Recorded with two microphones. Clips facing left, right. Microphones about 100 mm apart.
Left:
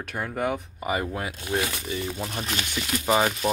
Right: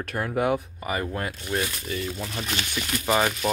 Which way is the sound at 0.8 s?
20° left (ahead or behind).